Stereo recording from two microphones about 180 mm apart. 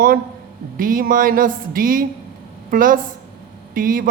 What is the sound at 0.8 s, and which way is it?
A woman's voice, 50° right (ahead or behind).